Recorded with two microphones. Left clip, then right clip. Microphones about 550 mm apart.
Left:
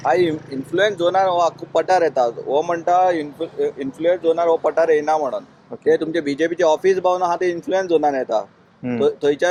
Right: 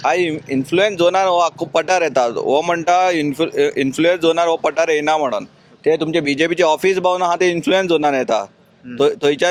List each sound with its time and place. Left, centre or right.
0.0 s speech: right